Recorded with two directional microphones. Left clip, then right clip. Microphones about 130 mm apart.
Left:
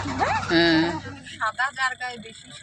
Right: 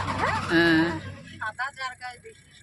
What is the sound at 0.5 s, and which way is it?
Speech, 5° left (ahead or behind).